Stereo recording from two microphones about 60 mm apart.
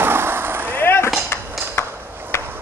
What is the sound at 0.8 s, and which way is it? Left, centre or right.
Skateboard, left.